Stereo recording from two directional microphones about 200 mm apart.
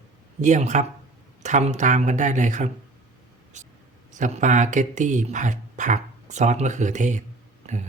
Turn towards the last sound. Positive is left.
turn(degrees=-40)  # may be behind; listen again after turning